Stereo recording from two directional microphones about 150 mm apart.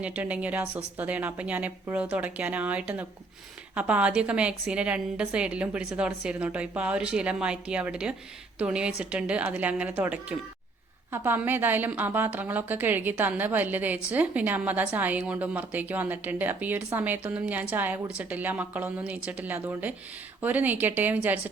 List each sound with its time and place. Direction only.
0.0 s a woman's voice: 10° right (ahead or behind)